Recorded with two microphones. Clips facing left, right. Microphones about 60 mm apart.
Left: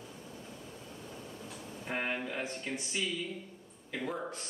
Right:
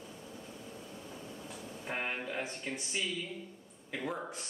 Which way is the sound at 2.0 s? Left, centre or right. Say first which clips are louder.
Left 1 dB; centre.